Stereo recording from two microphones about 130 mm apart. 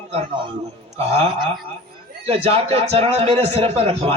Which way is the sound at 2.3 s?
50° right (ahead or behind).